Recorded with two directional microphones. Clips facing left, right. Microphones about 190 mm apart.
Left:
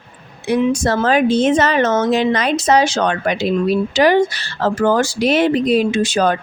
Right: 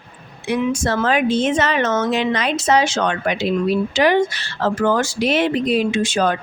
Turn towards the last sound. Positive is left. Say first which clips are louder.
# left 2 dB
turn(degrees=40)  # may be behind; listen again after turning